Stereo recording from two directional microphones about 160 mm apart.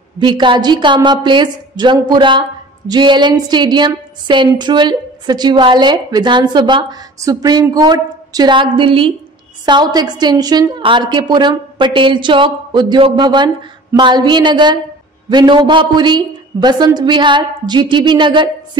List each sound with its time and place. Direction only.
0.2 s a woman's voice: 30° right (ahead or behind)